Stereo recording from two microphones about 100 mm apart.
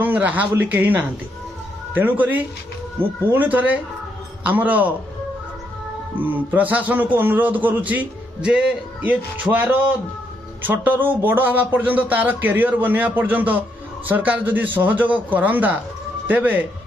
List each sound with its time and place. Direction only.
0.0 s a man's voice: 15° right (ahead or behind)
6.1 s a man's voice: 20° right (ahead or behind)